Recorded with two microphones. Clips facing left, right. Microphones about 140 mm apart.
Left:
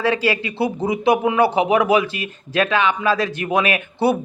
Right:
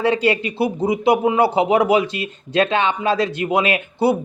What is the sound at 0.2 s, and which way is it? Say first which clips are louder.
Speech: right 2 dB; 20° right (ahead or behind).